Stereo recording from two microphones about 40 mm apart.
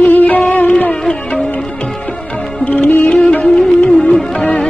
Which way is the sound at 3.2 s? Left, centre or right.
Left.